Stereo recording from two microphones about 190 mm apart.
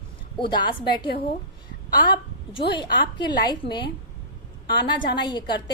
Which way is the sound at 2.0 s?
25° left (ahead or behind).